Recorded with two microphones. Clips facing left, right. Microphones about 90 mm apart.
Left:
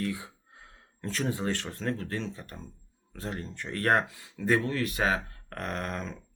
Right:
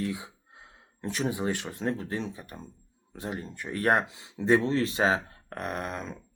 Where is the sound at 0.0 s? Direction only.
20° right (ahead or behind).